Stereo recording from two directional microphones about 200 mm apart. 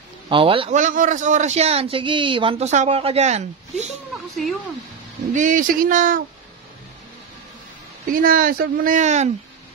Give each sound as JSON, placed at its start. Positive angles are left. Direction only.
{"t": 0.3, "sound": "a man's voice", "side_deg": -25}
{"t": 5.3, "sound": "a man's voice", "side_deg": -40}
{"t": 8.1, "sound": "speech", "side_deg": -45}